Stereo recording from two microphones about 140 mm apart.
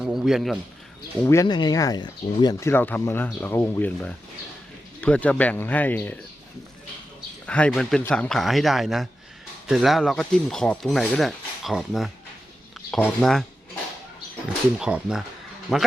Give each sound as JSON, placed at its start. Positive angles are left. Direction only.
{"t": 0.0, "sound": "speech", "side_deg": -5}
{"t": 1.2, "sound": "speech", "side_deg": 20}
{"t": 1.5, "sound": "speech", "side_deg": 30}
{"t": 2.6, "sound": "speech", "side_deg": 15}
{"t": 7.4, "sound": "speech", "side_deg": 10}
{"t": 13.2, "sound": "speech", "side_deg": 0}
{"t": 14.8, "sound": "speech", "side_deg": -5}